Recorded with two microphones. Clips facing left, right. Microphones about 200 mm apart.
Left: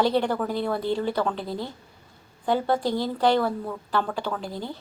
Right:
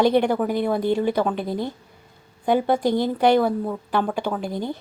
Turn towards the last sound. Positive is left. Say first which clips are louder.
# right 5 dB
turn(degrees=-15)  # may be behind; listen again after turning